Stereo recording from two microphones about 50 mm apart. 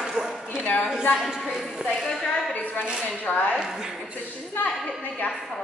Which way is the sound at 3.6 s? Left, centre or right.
Centre.